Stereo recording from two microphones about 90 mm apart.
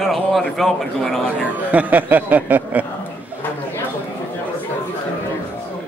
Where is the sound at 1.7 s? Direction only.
15° right (ahead or behind).